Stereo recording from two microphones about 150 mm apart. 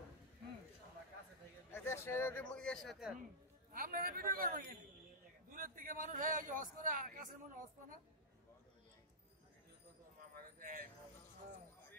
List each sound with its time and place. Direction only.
1.7 s a man's voice: 15° left (ahead or behind); by 3.2 s centre (ahead or behind)
3.7 s a man's voice: 70° right (ahead or behind)
5.5 s a man's voice: 70° right (ahead or behind)
10.3 s a sound: 70° right (ahead or behind)